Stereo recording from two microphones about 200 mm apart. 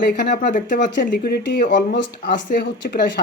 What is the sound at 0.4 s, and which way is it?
Speech, 40° left (ahead or behind).